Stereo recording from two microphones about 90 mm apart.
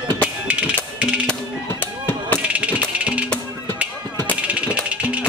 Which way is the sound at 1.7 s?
20° left (ahead or behind).